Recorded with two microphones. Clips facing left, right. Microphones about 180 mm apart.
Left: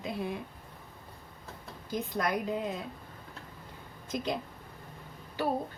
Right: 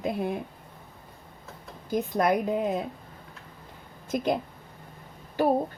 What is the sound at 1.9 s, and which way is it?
Speech, 55° right (ahead or behind).